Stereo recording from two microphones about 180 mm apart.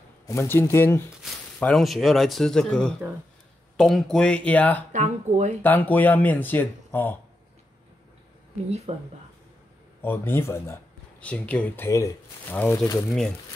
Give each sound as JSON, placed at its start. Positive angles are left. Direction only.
{"t": 0.3, "sound": "speech", "side_deg": 15}
{"t": 1.6, "sound": "speech", "side_deg": 0}
{"t": 4.9, "sound": "speech", "side_deg": -40}
{"t": 5.6, "sound": "speech", "side_deg": 10}
{"t": 8.9, "sound": "speech", "side_deg": -35}
{"t": 10.0, "sound": "speech", "side_deg": 15}